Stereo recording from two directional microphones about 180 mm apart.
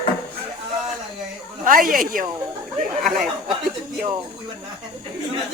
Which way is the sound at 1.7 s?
50° right (ahead or behind).